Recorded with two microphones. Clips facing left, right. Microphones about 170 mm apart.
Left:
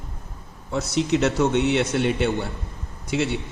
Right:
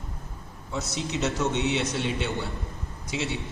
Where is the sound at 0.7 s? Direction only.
60° left (ahead or behind).